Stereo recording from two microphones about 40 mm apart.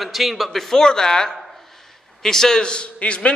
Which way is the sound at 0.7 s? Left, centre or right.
Centre.